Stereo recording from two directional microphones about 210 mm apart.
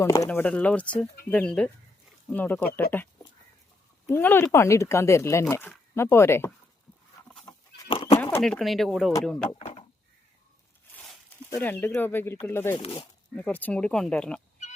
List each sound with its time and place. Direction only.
0.0 s speech: 15° left (ahead or behind)
4.1 s speech: 10° left (ahead or behind)
7.9 s a sound: 25° left (ahead or behind)
8.2 s speech: 5° left (ahead or behind)
9.6 s a sound: 30° left (ahead or behind)
11.5 s speech: 10° left (ahead or behind)
12.7 s speech: 25° left (ahead or behind)
13.3 s speech: 5° left (ahead or behind)